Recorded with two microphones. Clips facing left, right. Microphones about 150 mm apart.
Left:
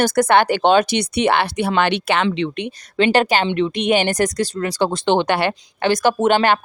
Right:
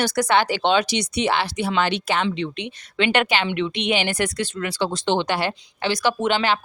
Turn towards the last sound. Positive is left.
turn(degrees=50)  # may be behind; listen again after turning